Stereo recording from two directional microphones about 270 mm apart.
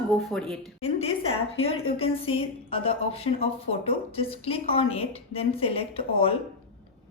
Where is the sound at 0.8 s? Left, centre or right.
Left.